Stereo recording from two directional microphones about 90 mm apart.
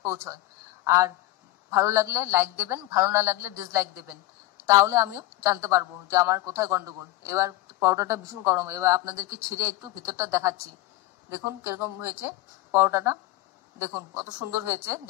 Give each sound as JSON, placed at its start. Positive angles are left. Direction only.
{"t": 0.0, "sound": "a woman's voice", "side_deg": -30}
{"t": 11.2, "sound": "speech", "side_deg": -20}